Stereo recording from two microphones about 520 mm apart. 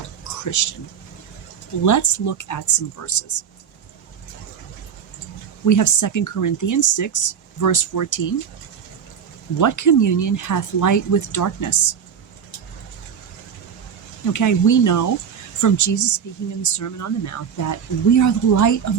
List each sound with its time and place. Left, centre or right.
0.6 s speech: left
1.8 s speech: left
5.6 s speech: left
9.6 s speech: left
14.3 s speech: left